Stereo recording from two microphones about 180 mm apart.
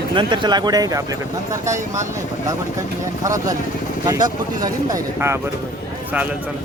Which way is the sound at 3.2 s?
20° right (ahead or behind).